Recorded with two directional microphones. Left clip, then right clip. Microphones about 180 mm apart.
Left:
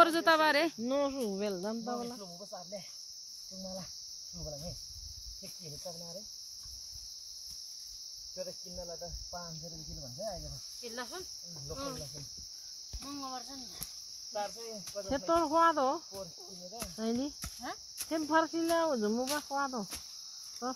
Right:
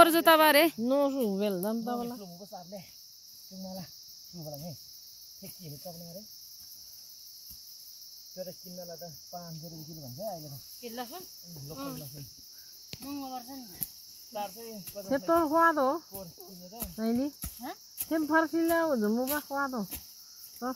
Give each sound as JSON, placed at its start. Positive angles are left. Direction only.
{"t": 0.0, "sound": "speech", "side_deg": -30}
{"t": 0.8, "sound": "cricket", "side_deg": -55}
{"t": 10.8, "sound": "cricket", "side_deg": 5}
{"t": 13.0, "sound": "cricket", "side_deg": 15}
{"t": 15.0, "sound": "speech", "side_deg": -40}
{"t": 17.6, "sound": "speech", "side_deg": 0}
{"t": 18.1, "sound": "speech", "side_deg": -45}